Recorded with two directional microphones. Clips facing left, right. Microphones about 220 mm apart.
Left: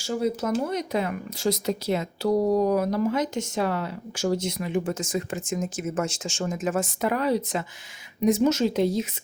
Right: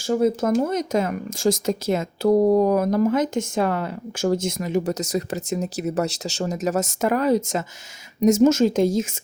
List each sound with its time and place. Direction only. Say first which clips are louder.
0.0 s speech: right 6 dB; 50° right (ahead or behind)